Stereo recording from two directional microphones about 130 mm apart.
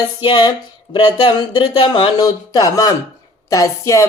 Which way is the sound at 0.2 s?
35° left (ahead or behind).